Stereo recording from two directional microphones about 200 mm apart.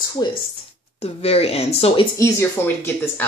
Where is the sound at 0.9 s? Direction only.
30° left (ahead or behind).